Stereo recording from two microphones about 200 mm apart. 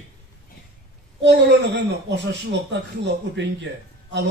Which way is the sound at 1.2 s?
60° right (ahead or behind).